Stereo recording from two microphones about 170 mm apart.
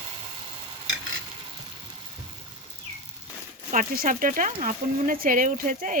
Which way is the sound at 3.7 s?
50° right (ahead or behind).